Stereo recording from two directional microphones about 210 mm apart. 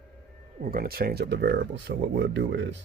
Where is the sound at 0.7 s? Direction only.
45° right (ahead or behind).